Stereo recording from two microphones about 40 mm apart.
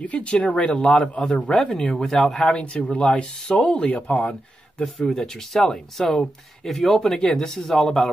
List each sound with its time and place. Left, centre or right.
0.0 s a man's voice: left
1.5 s speech: centre
2.6 s speech: left
3.9 s speech: left
4.8 s speech: centre